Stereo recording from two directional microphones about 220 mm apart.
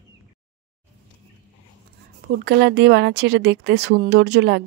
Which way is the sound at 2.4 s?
50° right (ahead or behind).